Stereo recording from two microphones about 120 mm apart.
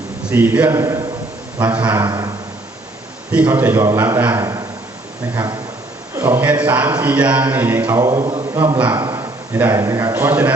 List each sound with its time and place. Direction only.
0.3 s a man's voice: 10° right (ahead or behind)
0.8 s a man's voice: 25° right (ahead or behind)
1.6 s a man's voice: 15° right (ahead or behind)
2.0 s a sound: 30° right (ahead or behind)
3.3 s a man's voice: 15° right (ahead or behind)
5.3 s a man's voice: 30° right (ahead or behind); by 7.9 s 15° right (ahead or behind)
7.9 s a man's voice: 25° right (ahead or behind)
8.9 s a sound: 30° right (ahead or behind)
9.6 s a man's voice: 20° right (ahead or behind)